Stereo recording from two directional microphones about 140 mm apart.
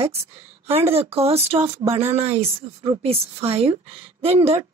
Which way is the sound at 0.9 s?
45° right (ahead or behind).